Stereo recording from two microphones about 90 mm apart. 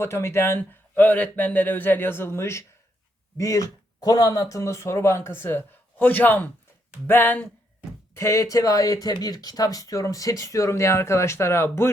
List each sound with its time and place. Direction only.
0.0 s a man's voice: 30° left (ahead or behind)